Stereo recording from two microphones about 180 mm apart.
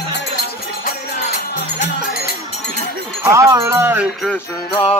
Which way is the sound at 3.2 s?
15° right (ahead or behind).